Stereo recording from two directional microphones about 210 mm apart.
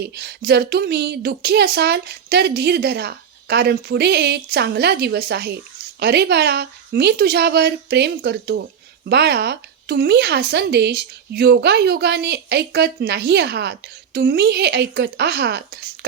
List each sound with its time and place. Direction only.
0.0 s speech: 50° right (ahead or behind)